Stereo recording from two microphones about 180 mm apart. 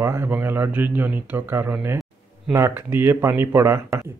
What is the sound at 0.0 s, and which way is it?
Speech, 15° right (ahead or behind).